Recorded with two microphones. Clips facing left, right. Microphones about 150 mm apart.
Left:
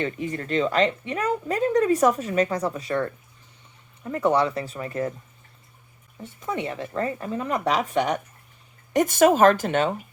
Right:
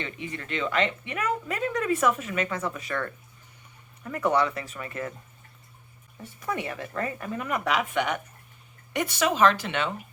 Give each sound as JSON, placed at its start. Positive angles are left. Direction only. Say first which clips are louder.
{"t": 0.0, "sound": "speech", "louder": "left 8 dB", "side_deg": 40}
{"t": 6.2, "sound": "speech", "louder": "left 3 dB", "side_deg": 25}